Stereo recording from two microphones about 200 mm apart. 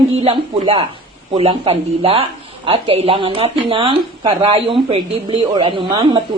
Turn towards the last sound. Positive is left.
turn(degrees=-25)  # may be behind; listen again after turning